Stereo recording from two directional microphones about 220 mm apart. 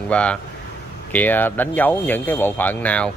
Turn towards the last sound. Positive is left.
turn(degrees=5)  # may be behind; listen again after turning